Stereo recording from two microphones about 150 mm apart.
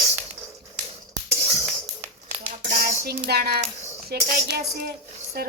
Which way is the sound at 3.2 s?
90° right.